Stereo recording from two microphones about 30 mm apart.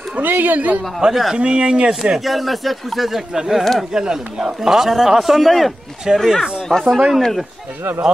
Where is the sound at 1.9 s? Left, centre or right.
Centre.